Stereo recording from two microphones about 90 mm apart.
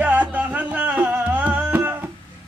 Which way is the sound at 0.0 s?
15° right (ahead or behind).